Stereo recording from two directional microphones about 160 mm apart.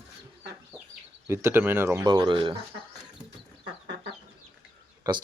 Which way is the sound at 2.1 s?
30° right (ahead or behind).